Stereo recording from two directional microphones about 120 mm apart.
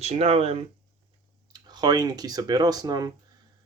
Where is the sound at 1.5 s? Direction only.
35° right (ahead or behind).